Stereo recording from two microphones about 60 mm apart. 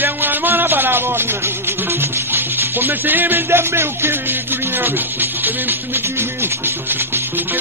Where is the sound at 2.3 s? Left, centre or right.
Right.